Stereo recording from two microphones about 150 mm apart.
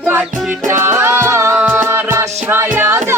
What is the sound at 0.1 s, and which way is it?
Music, 10° right (ahead or behind).